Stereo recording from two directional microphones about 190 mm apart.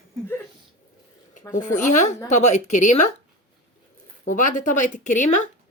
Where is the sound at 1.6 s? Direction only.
40° left (ahead or behind).